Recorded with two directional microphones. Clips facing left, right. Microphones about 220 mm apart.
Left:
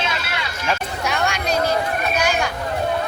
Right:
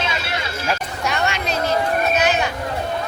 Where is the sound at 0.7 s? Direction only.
Centre (ahead or behind).